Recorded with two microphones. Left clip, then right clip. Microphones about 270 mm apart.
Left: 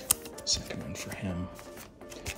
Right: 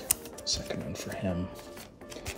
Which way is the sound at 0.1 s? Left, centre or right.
Centre.